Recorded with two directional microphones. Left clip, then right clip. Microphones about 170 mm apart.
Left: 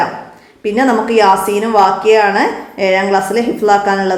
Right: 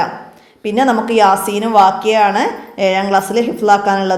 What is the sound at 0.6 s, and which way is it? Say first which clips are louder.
A woman's voice: left 1 dB; 30° right (ahead or behind).